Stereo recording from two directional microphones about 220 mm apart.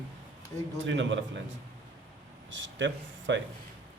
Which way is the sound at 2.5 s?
55° right (ahead or behind).